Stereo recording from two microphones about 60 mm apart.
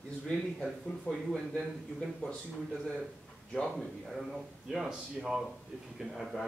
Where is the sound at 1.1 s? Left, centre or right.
Left.